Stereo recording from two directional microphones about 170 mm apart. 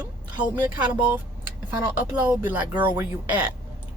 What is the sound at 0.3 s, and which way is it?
Speech, 10° right (ahead or behind).